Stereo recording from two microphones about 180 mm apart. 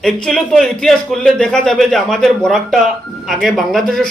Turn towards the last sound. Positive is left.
turn(degrees=0)  # may be behind; listen again after turning